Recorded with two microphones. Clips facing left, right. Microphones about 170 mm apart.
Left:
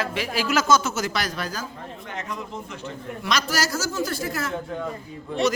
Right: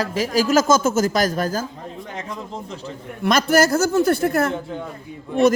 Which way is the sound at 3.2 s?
55° right (ahead or behind).